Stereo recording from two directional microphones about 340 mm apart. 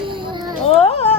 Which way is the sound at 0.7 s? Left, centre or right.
Centre.